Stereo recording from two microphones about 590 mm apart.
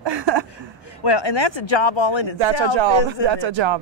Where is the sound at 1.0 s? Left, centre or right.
Left.